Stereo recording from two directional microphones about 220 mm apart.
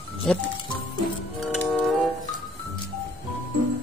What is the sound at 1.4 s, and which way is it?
Music, centre (ahead or behind).